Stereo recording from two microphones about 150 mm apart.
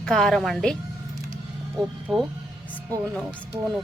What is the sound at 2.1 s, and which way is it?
Speech, 30° right (ahead or behind).